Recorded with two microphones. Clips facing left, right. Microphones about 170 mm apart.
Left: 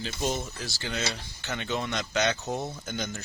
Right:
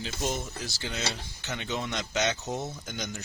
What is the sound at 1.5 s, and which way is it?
Speech, 10° right (ahead or behind).